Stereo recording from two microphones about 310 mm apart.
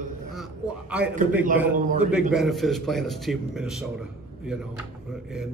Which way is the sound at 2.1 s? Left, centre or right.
Centre.